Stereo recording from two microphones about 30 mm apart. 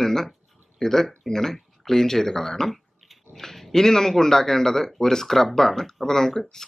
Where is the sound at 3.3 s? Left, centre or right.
Centre.